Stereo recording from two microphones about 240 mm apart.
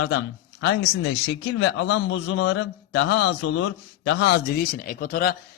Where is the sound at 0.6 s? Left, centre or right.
Left.